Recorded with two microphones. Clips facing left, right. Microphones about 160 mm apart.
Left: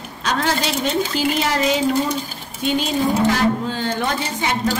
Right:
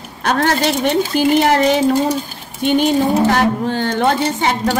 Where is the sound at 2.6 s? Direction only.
60° right (ahead or behind).